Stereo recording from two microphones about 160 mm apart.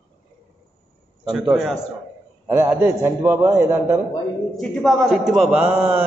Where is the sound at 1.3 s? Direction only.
Centre (ahead or behind).